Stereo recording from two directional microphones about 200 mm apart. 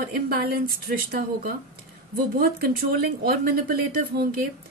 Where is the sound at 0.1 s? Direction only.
50° right (ahead or behind).